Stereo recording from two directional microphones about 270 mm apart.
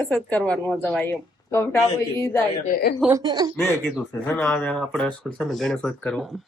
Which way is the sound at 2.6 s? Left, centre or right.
Left.